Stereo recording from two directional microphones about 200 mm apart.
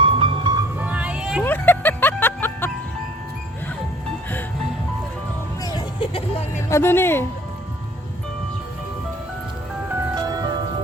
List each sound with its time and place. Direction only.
0.0 s music: 25° right (ahead or behind)
0.8 s music: 5° right (ahead or behind)
1.5 s music: 10° left (ahead or behind)
5.6 s music: 25° left (ahead or behind)
6.7 s speech: 15° left (ahead or behind)
10.2 s music: 20° right (ahead or behind)